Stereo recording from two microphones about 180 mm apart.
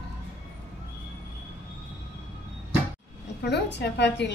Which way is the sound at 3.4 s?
70° left (ahead or behind).